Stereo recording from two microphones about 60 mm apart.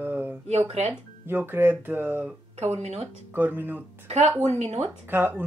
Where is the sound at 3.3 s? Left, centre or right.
Right.